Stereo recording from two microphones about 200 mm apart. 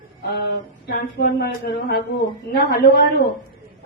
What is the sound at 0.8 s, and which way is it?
A woman's voice, 50° left (ahead or behind).